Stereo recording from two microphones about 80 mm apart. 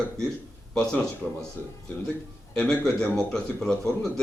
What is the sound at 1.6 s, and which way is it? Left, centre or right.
Speech, left.